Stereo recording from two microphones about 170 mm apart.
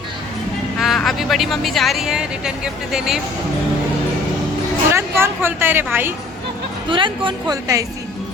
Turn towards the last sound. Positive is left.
turn(degrees=-20)  # may be behind; listen again after turning